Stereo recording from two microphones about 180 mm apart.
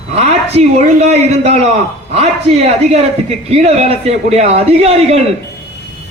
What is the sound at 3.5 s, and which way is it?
A man's voice, 35° right (ahead or behind).